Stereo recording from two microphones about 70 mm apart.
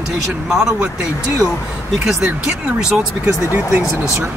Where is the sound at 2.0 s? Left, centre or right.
Centre.